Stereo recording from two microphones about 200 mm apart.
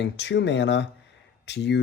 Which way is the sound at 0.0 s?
60° left (ahead or behind).